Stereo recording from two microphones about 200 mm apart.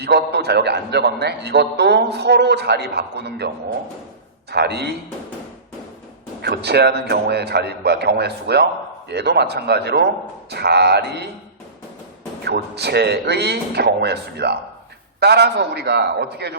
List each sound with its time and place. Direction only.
0.0 s a man's voice: 55° right (ahead or behind)
4.5 s a man's voice: 55° right (ahead or behind)
6.4 s a man's voice: 55° right (ahead or behind)
12.5 s a man's voice: 55° right (ahead or behind)